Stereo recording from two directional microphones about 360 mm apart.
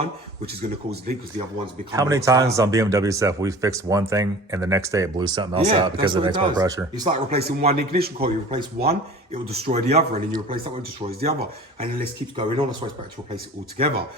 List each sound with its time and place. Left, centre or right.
0.0 s speech: right
1.6 s speech: centre
7.3 s speech: right
13.3 s speech: right